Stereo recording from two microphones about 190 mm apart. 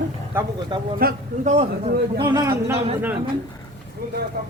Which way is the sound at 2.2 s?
20° right (ahead or behind).